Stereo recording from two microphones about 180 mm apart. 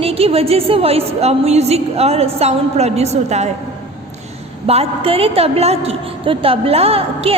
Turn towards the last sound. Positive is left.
turn(degrees=-30)  # may be behind; listen again after turning